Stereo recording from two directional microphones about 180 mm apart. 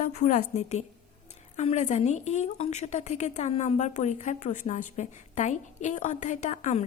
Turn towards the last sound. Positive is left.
turn(degrees=40)  # may be behind; listen again after turning